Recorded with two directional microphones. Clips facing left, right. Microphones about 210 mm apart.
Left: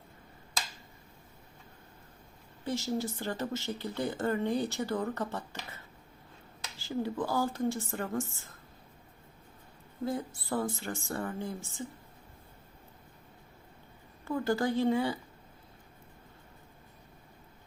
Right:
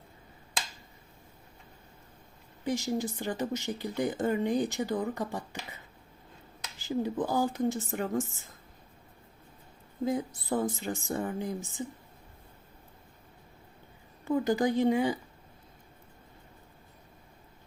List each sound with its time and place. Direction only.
2.6 s speech: 15° right (ahead or behind)
10.0 s speech: 15° right (ahead or behind)
14.3 s speech: 15° right (ahead or behind)